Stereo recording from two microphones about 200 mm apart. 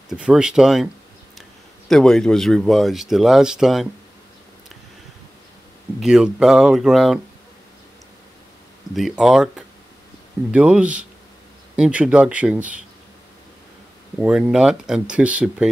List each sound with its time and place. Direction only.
0.1 s speech: 5° right (ahead or behind)
1.9 s speech: centre (ahead or behind)
5.9 s speech: 5° right (ahead or behind)
8.9 s speech: centre (ahead or behind)
14.2 s speech: 5° right (ahead or behind)